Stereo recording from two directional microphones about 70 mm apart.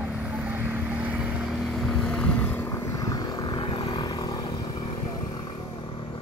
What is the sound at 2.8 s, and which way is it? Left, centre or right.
Vehicle, left.